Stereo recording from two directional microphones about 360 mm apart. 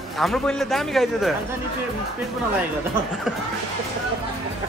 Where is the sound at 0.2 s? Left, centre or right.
Centre.